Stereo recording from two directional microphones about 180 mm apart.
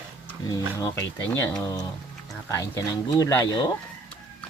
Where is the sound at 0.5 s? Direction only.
20° left (ahead or behind).